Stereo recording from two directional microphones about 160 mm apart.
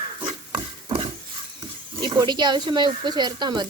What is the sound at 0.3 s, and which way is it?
Pig, 35° right (ahead or behind).